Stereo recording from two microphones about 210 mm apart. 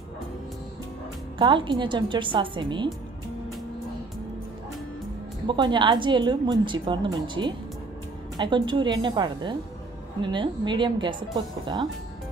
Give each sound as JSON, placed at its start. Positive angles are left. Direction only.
{"t": 1.4, "sound": "a woman's voice", "side_deg": -20}
{"t": 5.5, "sound": "a woman's voice", "side_deg": -20}